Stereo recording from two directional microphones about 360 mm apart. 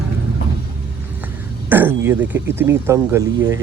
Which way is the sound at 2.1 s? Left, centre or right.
Centre.